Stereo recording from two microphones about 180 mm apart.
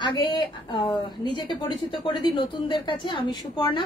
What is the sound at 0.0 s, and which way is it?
Speech, 25° left (ahead or behind).